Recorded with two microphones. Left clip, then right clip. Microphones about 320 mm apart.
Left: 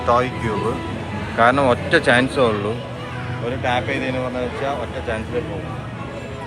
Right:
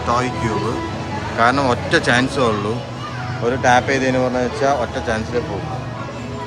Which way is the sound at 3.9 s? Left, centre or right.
Right.